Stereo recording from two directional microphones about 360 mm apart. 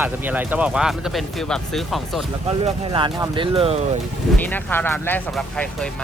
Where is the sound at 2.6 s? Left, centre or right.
Centre.